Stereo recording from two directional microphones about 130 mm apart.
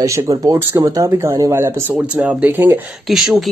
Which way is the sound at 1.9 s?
10° right (ahead or behind).